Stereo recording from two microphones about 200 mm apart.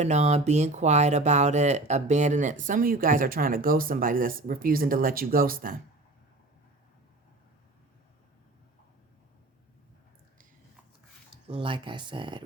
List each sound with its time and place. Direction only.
0.0 s speech: 35° right (ahead or behind)
11.4 s speech: 25° right (ahead or behind)